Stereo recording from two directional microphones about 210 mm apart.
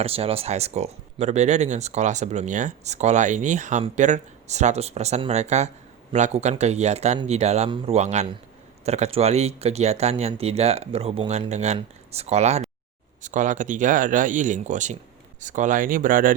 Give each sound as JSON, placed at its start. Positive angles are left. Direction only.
{"t": 0.0, "sound": "speech", "side_deg": -25}